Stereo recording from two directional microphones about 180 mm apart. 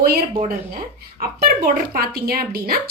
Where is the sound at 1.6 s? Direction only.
55° right (ahead or behind).